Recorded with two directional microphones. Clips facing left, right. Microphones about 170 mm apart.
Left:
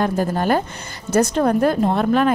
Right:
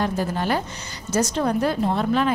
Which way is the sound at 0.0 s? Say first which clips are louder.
Left 4 dB; 50° left (ahead or behind).